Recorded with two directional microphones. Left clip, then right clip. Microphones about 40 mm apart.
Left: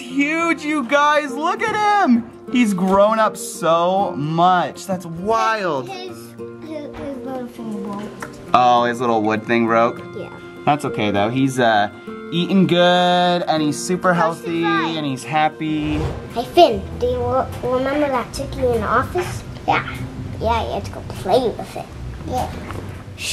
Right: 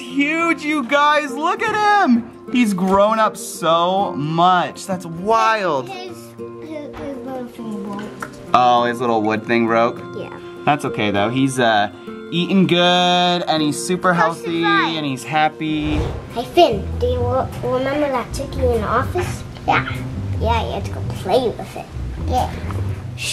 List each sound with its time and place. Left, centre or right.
0.1 s speech: centre
4.9 s speech: centre
8.5 s speech: centre
16.3 s a woman's voice: centre
19.6 s speech: centre
20.4 s a woman's voice: centre